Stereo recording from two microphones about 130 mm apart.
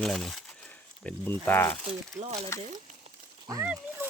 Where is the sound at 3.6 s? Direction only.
10° right (ahead or behind).